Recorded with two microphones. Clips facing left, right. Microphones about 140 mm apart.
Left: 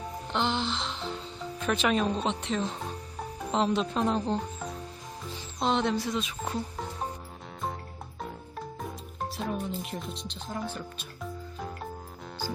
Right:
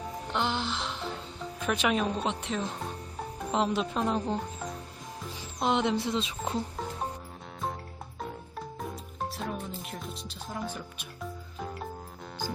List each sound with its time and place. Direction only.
0.3 s speech: 5° right (ahead or behind); by 6.6 s 25° right (ahead or behind)
6.7 s music: centre (ahead or behind)
8.2 s music: centre (ahead or behind)